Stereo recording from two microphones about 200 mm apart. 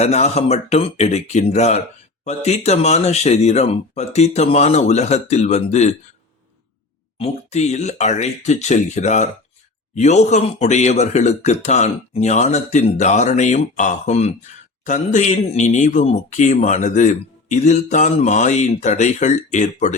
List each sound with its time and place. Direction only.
0.0 s speech: 35° left (ahead or behind)
7.2 s speech: 35° left (ahead or behind)